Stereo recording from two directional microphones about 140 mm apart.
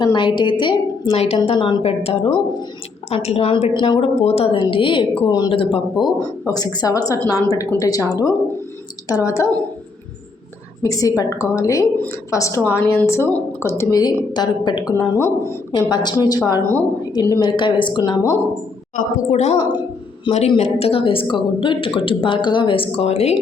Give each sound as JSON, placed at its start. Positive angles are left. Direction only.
{"t": 0.0, "sound": "a woman's voice", "side_deg": 35}
{"t": 1.5, "sound": "a woman's voice", "side_deg": 35}
{"t": 6.4, "sound": "speech", "side_deg": 25}
{"t": 10.8, "sound": "a woman's voice", "side_deg": 25}
{"t": 14.3, "sound": "a woman's voice", "side_deg": 30}
{"t": 14.9, "sound": "speech", "side_deg": 20}
{"t": 15.7, "sound": "a woman's voice", "side_deg": 30}
{"t": 18.9, "sound": "a woman's voice", "side_deg": 60}
{"t": 20.3, "sound": "a woman's voice", "side_deg": 35}